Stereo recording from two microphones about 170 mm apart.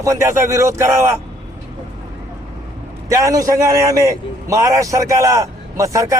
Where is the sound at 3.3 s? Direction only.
20° right (ahead or behind).